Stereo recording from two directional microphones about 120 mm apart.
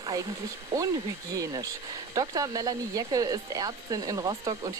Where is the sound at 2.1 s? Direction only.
30° right (ahead or behind).